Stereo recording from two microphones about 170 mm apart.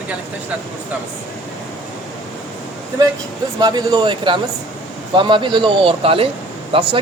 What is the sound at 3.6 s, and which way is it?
A man's voice, 25° right (ahead or behind).